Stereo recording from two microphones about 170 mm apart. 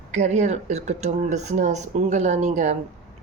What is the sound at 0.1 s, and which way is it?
Speech, 45° right (ahead or behind).